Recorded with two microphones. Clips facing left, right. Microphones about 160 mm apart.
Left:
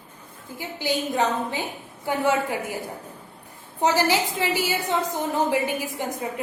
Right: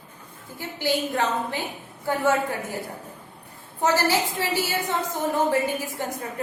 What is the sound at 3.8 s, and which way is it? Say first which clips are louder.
A woman's voice: left 1 dB; 15° left (ahead or behind).